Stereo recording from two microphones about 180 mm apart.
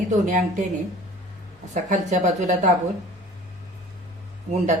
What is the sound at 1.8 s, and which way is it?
Speech, 45° right (ahead or behind).